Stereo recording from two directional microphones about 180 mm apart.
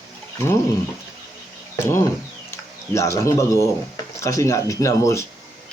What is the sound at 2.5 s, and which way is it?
Speech, 15° left (ahead or behind).